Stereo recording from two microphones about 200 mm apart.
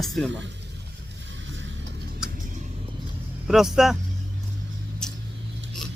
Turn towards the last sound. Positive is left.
turn(degrees=5)  # may be behind; listen again after turning